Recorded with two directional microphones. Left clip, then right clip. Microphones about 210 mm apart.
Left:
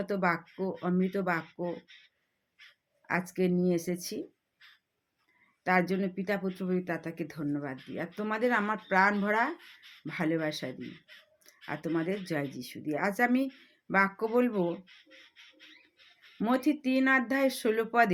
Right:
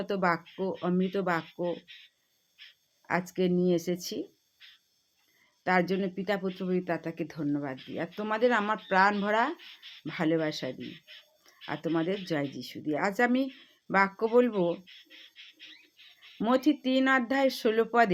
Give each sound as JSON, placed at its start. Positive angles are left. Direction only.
{"t": 0.0, "sound": "speech", "side_deg": -5}
{"t": 2.6, "sound": "a sound", "side_deg": -40}
{"t": 3.1, "sound": "speech", "side_deg": -5}
{"t": 4.6, "sound": "a sound", "side_deg": -40}
{"t": 5.6, "sound": "speech", "side_deg": -5}
{"t": 9.6, "sound": "speech", "side_deg": -40}
{"t": 10.1, "sound": "speech", "side_deg": -5}
{"t": 10.7, "sound": "speech", "side_deg": -40}
{"t": 11.4, "sound": "speech", "side_deg": -10}
{"t": 14.8, "sound": "music", "side_deg": -40}
{"t": 16.4, "sound": "speech", "side_deg": -5}